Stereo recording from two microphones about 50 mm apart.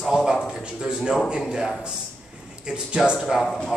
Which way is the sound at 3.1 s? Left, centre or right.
Centre.